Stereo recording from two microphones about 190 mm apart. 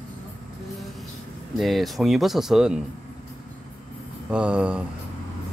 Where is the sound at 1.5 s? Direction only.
Centre (ahead or behind).